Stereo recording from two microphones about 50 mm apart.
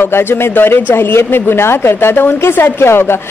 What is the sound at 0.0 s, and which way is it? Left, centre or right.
Speech, left.